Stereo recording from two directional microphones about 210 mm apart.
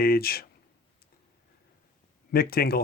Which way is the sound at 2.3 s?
45° left (ahead or behind).